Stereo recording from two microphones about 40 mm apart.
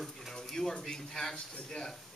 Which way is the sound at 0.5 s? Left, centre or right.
Centre.